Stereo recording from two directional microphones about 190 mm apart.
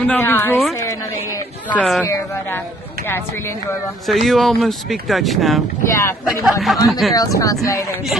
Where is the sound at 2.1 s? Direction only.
10° left (ahead or behind).